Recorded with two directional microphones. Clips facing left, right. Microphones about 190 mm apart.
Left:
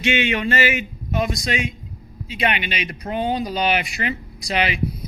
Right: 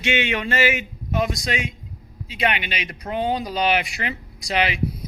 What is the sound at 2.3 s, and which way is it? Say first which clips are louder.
Speech: left 1 dB; 15° right (ahead or behind).